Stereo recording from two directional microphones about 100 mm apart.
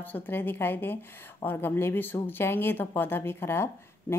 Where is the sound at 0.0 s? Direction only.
20° left (ahead or behind).